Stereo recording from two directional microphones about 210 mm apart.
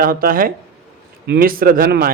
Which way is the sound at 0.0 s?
45° right (ahead or behind).